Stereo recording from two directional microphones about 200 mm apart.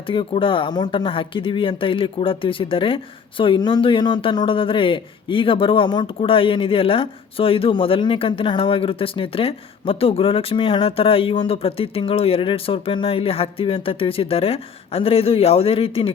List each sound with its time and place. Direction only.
0.1 s speech: 25° left (ahead or behind)